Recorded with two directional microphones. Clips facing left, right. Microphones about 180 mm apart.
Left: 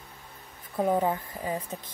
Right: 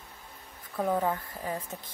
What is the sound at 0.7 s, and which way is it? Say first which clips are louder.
A woman's voice: left 3 dB; 20° left (ahead or behind).